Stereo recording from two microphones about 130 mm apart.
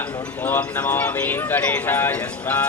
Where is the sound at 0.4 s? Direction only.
15° left (ahead or behind).